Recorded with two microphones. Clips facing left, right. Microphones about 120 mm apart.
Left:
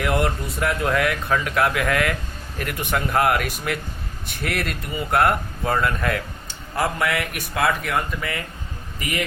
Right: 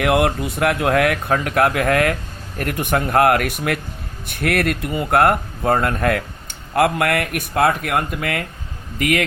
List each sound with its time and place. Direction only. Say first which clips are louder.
0.0 s speech: right 5 dB; 60° right (ahead or behind); by 9.2 s 80° right